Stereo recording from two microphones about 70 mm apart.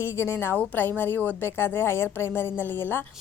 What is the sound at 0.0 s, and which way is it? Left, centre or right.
Speech, left.